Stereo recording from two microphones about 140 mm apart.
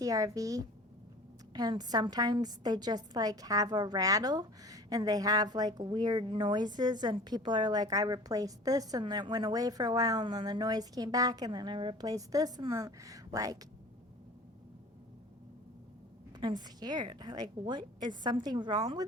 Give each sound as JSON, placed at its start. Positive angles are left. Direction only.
{"t": 0.0, "sound": "a woman's voice", "side_deg": -25}
{"t": 16.4, "sound": "a woman's voice", "side_deg": -30}